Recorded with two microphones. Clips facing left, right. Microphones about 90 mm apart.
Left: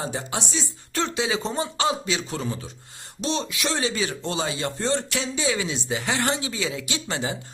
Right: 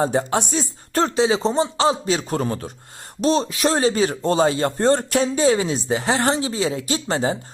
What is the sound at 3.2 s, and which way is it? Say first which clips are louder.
Speech: right 8 dB; 40° right (ahead or behind).